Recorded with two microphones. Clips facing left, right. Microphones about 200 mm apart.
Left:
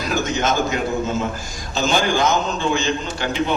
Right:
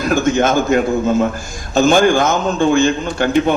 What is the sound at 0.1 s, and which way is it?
A man's voice, 50° right (ahead or behind).